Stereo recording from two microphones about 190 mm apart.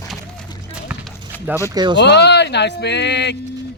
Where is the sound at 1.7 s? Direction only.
25° right (ahead or behind).